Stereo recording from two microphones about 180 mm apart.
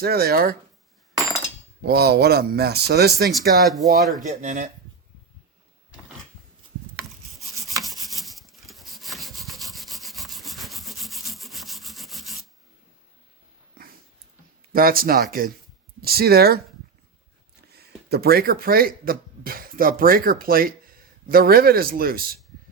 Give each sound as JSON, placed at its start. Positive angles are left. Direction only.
{"t": 0.0, "sound": "speech", "side_deg": -60}
{"t": 1.8, "sound": "speech", "side_deg": -60}
{"t": 3.6, "sound": "speech", "side_deg": 0}
{"t": 4.2, "sound": "speech", "side_deg": -45}
{"t": 7.8, "sound": "rub", "side_deg": 0}
{"t": 14.7, "sound": "speech", "side_deg": -55}
{"t": 17.7, "sound": "speech", "side_deg": -65}